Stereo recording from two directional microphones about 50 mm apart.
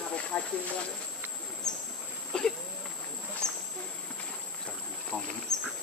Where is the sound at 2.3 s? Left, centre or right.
Centre.